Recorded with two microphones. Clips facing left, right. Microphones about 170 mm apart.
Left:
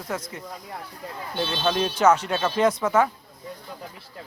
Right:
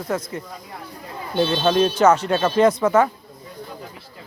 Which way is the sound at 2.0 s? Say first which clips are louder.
Right 4 dB; 10° left (ahead or behind).